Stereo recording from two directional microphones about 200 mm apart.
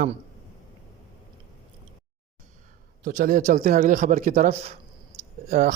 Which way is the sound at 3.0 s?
40° right (ahead or behind).